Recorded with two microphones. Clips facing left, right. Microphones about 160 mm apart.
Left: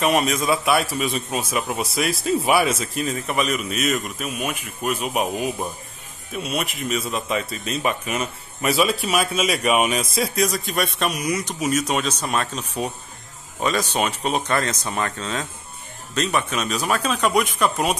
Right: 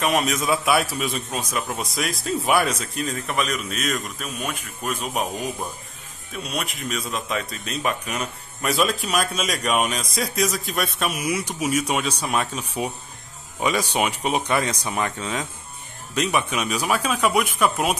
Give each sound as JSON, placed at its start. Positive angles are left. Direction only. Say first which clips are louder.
{"t": 0.0, "sound": "speech", "louder": "left 2 dB", "side_deg": 0}